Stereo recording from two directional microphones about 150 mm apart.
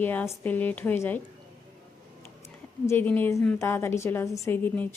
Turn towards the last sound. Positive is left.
turn(degrees=10)  # may be behind; listen again after turning